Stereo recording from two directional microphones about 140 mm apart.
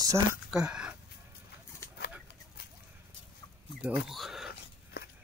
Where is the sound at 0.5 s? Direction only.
5° right (ahead or behind).